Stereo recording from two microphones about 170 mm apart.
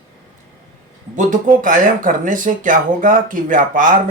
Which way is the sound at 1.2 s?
50° right (ahead or behind).